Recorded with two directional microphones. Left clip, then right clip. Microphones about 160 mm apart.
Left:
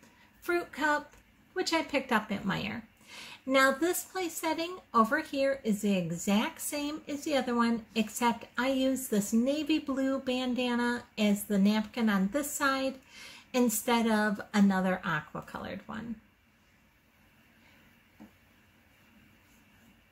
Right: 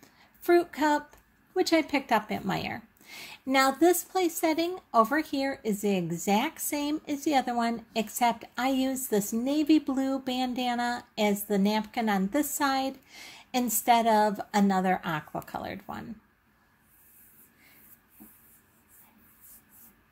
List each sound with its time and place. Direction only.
0.4 s speech: 40° right (ahead or behind)